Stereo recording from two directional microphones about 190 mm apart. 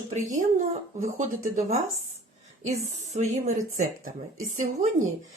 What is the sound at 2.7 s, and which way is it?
Speech, 35° right (ahead or behind).